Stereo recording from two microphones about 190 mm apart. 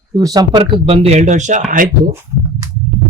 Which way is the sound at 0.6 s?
35° right (ahead or behind).